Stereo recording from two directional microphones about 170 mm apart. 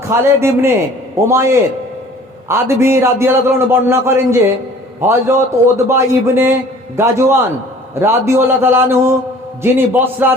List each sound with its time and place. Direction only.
0.1 s a man's voice: 15° right (ahead or behind)